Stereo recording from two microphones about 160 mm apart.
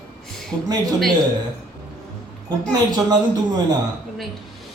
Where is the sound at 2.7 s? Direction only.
25° right (ahead or behind).